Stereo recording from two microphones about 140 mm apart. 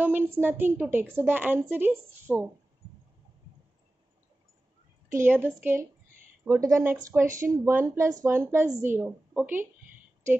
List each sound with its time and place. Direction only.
0.0 s a woman's voice: 15° right (ahead or behind)
5.1 s a woman's voice: 15° right (ahead or behind)